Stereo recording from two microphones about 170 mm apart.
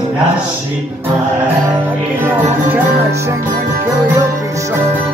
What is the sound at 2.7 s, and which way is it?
Music, 15° right (ahead or behind).